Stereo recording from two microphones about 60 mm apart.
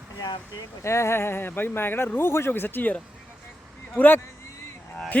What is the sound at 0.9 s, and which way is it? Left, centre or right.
Speech, left.